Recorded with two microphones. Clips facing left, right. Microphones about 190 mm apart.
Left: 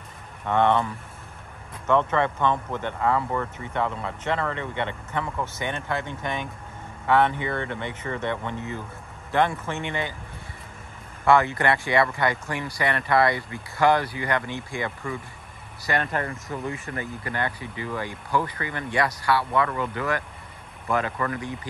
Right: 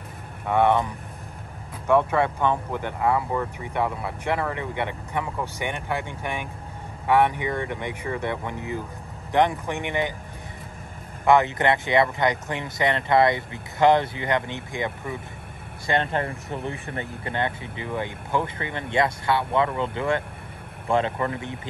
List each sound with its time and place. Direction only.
0.5 s speech: 10° right (ahead or behind)
11.2 s speech: 20° right (ahead or behind)